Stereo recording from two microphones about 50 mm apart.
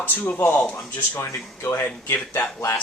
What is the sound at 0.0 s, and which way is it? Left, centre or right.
Speech, left.